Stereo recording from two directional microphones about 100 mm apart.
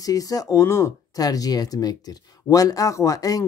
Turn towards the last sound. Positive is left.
turn(degrees=35)  # may be behind; listen again after turning